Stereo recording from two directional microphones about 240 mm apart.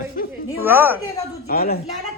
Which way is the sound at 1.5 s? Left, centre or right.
Left.